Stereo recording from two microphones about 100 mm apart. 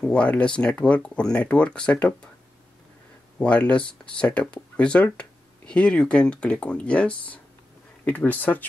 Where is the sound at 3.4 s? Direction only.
10° left (ahead or behind).